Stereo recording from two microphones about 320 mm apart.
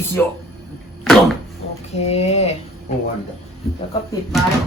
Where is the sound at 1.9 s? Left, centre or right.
Centre.